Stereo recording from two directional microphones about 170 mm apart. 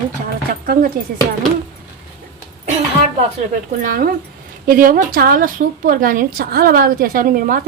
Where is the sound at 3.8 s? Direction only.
60° right (ahead or behind).